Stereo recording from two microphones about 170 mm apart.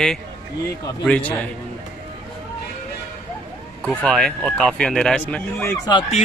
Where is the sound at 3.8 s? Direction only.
Centre (ahead or behind).